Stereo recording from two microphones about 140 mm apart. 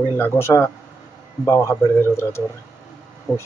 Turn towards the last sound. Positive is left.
turn(degrees=10)  # may be behind; listen again after turning